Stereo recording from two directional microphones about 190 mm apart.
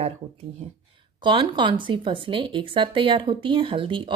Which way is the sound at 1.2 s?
25° right (ahead or behind).